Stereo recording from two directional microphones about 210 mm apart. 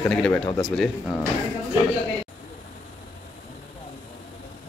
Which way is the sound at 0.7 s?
5° left (ahead or behind).